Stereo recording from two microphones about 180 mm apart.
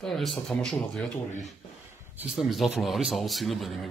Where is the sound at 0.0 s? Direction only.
Centre (ahead or behind).